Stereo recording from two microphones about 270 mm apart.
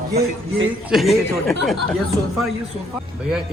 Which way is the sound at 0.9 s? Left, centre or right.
Centre.